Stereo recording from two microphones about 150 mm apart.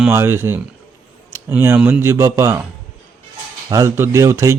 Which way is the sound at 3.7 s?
20° right (ahead or behind).